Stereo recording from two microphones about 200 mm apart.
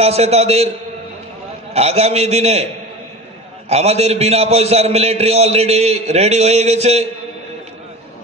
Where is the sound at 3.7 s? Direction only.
30° right (ahead or behind).